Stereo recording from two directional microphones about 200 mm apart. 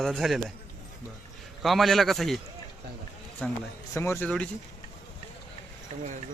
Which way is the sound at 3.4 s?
5° left (ahead or behind).